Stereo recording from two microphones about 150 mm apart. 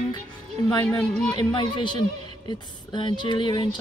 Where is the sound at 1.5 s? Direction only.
30° left (ahead or behind).